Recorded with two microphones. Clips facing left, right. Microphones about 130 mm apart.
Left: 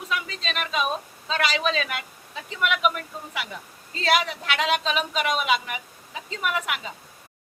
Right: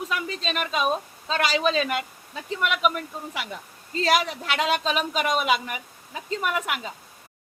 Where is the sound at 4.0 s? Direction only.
40° right (ahead or behind).